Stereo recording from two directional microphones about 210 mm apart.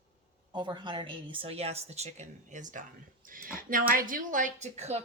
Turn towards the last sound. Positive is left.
turn(degrees=-30)  # may be behind; listen again after turning